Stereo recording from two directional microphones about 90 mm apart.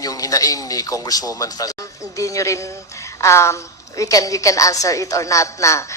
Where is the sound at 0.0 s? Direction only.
40° left (ahead or behind).